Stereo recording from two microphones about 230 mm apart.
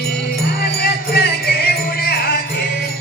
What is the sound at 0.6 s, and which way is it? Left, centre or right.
Music, left.